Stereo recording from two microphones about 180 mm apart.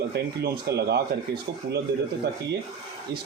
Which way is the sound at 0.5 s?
65° right (ahead or behind).